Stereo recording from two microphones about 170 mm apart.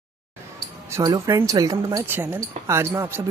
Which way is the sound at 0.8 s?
20° right (ahead or behind).